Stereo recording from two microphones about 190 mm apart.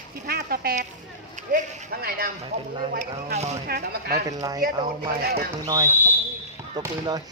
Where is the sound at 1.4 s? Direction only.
45° right (ahead or behind).